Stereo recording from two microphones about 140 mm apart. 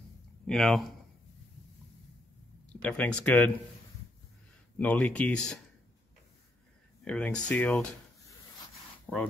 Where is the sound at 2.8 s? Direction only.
5° left (ahead or behind).